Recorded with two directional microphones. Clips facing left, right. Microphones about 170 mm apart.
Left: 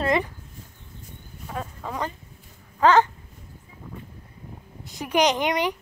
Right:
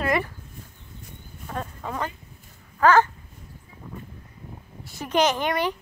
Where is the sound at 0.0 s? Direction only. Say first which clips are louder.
Left 1 dB; 20° left (ahead or behind).